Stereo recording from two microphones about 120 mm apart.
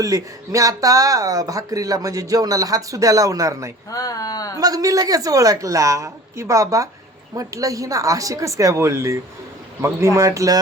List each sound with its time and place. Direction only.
0.0 s speech: 30° right (ahead or behind)
3.9 s speech: 30° left (ahead or behind)
4.6 s speech: 30° right (ahead or behind)